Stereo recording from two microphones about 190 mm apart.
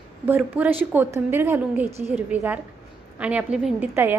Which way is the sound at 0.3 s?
10° right (ahead or behind).